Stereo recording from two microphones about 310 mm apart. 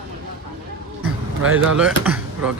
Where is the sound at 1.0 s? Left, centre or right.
Right.